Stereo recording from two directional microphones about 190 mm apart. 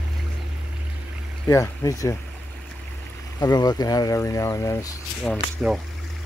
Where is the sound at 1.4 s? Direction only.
15° left (ahead or behind).